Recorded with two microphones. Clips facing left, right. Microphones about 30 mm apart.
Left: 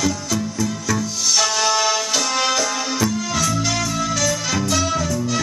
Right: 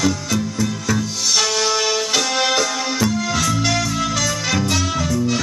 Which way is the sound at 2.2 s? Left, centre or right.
Right.